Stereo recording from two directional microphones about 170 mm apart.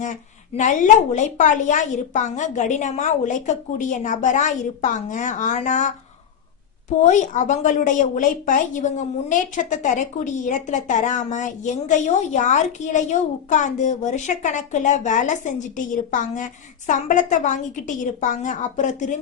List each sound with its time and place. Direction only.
0.0 s a woman's voice: 45° left (ahead or behind)
7.0 s a woman's voice: 45° left (ahead or behind)